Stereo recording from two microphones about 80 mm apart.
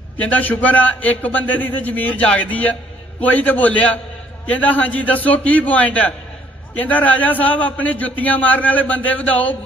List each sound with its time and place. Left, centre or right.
0.2 s a man's voice: centre